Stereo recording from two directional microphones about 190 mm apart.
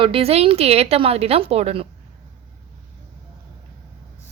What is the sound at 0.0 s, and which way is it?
A woman's voice, 30° right (ahead or behind).